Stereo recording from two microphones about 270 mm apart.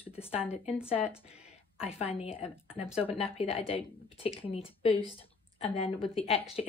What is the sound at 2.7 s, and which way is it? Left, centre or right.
Speech, centre.